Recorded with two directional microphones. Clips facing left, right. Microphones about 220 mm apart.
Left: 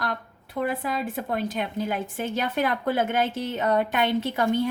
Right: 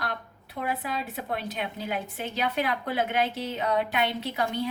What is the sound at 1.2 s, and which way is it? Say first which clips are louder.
A woman's voice: left 5 dB; 45° left (ahead or behind).